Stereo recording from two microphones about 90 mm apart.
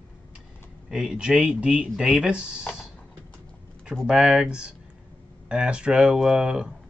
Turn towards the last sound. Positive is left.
turn(degrees=-10)  # may be behind; listen again after turning